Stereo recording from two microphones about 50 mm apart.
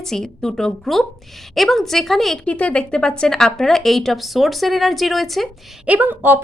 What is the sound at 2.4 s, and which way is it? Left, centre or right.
A woman's voice, left.